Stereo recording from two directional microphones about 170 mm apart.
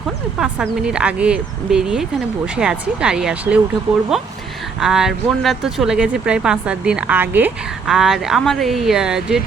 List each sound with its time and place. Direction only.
0.3 s speech: 5° right (ahead or behind)